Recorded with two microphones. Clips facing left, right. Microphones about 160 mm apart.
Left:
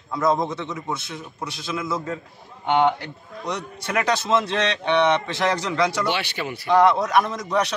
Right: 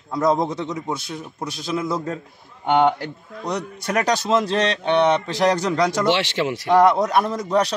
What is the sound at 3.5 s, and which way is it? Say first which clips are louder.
A man's voice: right 3 dB; 40° right (ahead or behind).